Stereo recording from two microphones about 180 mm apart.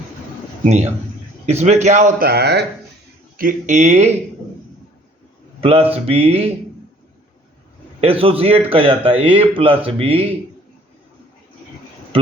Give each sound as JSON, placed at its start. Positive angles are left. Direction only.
{"t": 0.6, "sound": "a man's voice", "side_deg": -40}
{"t": 3.3, "sound": "a man's voice", "side_deg": -45}
{"t": 5.5, "sound": "a man's voice", "side_deg": -35}
{"t": 8.0, "sound": "a man's voice", "side_deg": -30}
{"t": 12.1, "sound": "speech", "side_deg": -30}